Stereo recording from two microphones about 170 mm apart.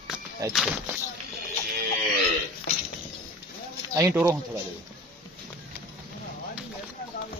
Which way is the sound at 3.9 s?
15° right (ahead or behind).